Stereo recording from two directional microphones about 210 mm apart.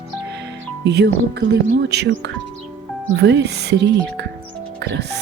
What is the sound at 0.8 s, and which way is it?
Speech, 55° right (ahead or behind).